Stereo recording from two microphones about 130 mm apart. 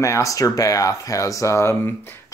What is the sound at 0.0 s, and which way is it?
Speech, 25° left (ahead or behind).